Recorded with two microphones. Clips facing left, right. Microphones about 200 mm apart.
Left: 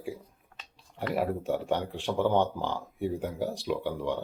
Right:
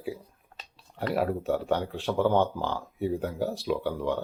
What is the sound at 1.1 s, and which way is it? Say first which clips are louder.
Speech: right 2 dB; 15° left (ahead or behind).